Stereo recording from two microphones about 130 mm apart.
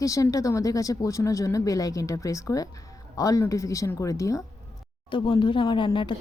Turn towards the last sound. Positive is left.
turn(degrees=40)  # may be behind; listen again after turning